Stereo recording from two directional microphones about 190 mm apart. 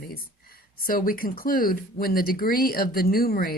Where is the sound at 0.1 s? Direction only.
50° left (ahead or behind).